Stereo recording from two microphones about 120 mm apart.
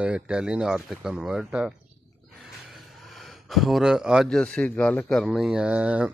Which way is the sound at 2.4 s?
Centre (ahead or behind).